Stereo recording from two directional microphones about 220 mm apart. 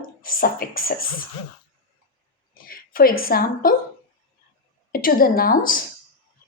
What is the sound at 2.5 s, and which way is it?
Speech, 40° left (ahead or behind).